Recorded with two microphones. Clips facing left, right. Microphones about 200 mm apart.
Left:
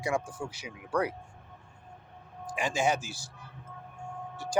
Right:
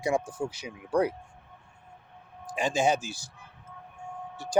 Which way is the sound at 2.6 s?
20° right (ahead or behind).